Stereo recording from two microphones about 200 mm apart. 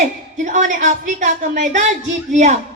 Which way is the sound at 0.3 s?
40° right (ahead or behind).